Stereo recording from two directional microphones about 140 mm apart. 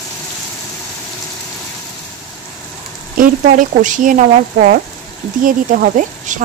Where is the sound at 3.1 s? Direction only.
70° right (ahead or behind); by 4.8 s 90° right.